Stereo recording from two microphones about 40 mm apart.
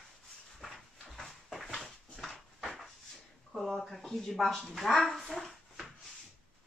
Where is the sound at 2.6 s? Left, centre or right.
Centre.